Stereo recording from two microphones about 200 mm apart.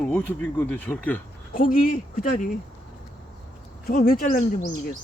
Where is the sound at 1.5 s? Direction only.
45° left (ahead or behind).